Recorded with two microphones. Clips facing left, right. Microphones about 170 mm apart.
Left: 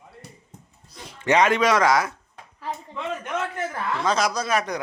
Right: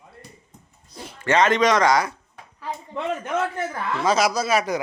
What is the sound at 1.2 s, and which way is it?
Speech, 15° left (ahead or behind).